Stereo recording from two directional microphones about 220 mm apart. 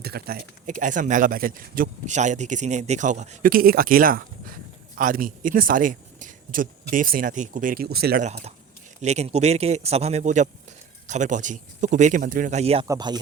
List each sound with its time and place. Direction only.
0.0 s speech: 45° right (ahead or behind)
12.9 s speech: 20° right (ahead or behind)